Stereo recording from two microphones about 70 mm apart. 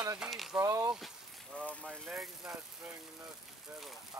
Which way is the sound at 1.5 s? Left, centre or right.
Centre.